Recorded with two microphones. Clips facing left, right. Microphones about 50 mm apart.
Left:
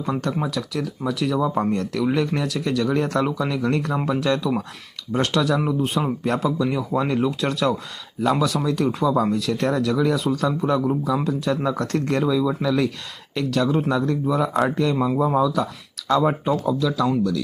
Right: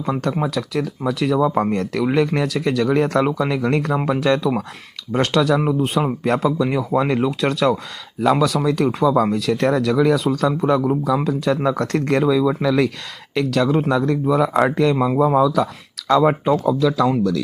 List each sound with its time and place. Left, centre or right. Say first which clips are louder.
0.0 s speech: right 3 dB; right
0.4 s speech: right 4 dB; right
5.5 s speech: right 3 dB; right
6.2 s speech: right 4 dB; right
11.8 s speech: right 4 dB; right
14.0 s speech: right 4 dB; right
15.2 s speech: right 6 dB; right